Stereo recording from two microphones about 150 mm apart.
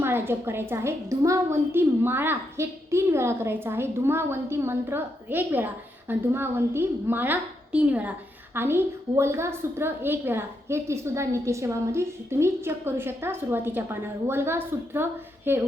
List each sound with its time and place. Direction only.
0.0 s a woman's voice: 15° right (ahead or behind)